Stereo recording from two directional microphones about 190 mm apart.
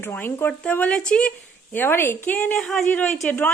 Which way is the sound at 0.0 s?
10° left (ahead or behind).